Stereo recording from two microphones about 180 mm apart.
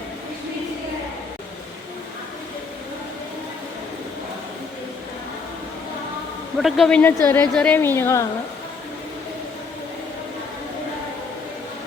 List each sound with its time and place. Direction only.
6.6 s a man's voice: centre (ahead or behind)
7.3 s speech: 15° left (ahead or behind)